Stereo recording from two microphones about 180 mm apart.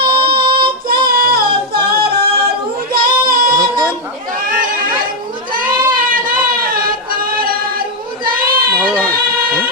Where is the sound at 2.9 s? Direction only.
55° right (ahead or behind).